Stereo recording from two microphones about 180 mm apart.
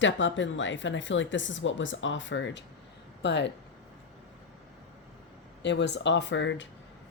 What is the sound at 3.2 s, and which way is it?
Speech, 75° left (ahead or behind).